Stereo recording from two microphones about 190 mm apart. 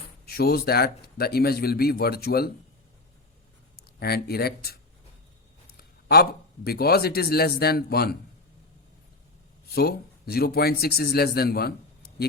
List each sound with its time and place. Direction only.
0.3 s speech: 55° left (ahead or behind)
3.8 s speech: 55° left (ahead or behind)
5.7 s a sound: 55° left (ahead or behind)
6.7 s speech: 55° left (ahead or behind)
9.6 s speech: 55° left (ahead or behind)